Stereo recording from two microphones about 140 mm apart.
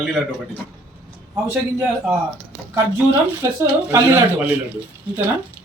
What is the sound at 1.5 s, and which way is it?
Speech, 10° right (ahead or behind).